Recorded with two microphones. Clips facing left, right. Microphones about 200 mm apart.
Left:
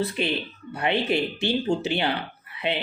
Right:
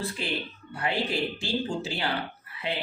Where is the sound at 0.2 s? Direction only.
20° left (ahead or behind).